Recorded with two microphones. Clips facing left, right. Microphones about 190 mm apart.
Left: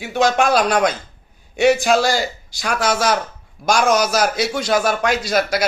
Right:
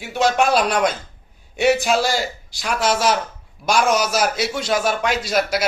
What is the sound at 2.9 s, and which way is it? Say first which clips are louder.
Speech: right 1 dB; 50° left (ahead or behind).